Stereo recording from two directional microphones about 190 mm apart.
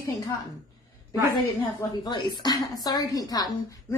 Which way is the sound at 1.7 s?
25° left (ahead or behind).